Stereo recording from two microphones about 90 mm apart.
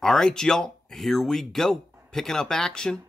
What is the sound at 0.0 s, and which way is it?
Speech, 5° left (ahead or behind).